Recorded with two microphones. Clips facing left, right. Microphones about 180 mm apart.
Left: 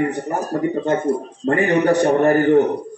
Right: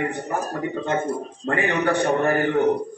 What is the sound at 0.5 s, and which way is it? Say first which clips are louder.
A man's voice: left 8 dB; 40° left (ahead or behind).